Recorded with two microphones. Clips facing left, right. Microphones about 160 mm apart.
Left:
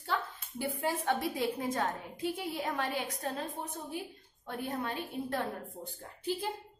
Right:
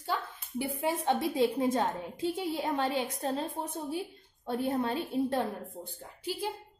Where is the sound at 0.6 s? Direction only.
25° right (ahead or behind).